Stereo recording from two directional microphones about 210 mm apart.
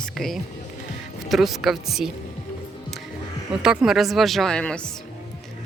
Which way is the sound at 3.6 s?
5° right (ahead or behind).